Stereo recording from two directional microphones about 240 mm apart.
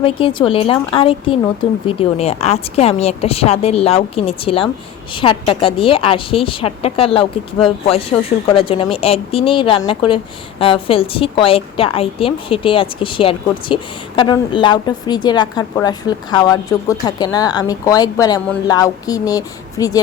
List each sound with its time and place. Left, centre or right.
0.0 s a woman's voice: left
8.5 s a woman's voice: left